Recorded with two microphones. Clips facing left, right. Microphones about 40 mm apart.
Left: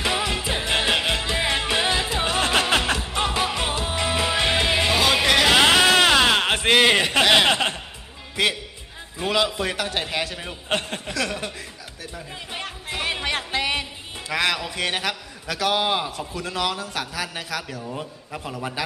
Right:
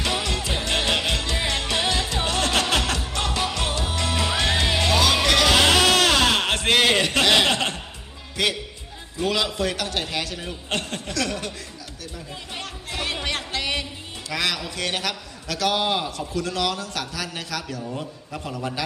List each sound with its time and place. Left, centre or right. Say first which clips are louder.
0.0 s music: left 2 dB; centre
8.4 s a man's voice: left 1 dB; centre
12.5 s music: left 2 dB; centre
14.3 s a man's voice: left 3 dB; left